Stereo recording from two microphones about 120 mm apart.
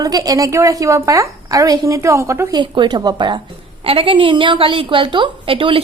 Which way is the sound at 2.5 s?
40° right (ahead or behind).